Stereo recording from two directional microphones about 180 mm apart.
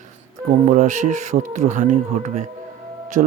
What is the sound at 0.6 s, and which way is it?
Speech, 45° right (ahead or behind).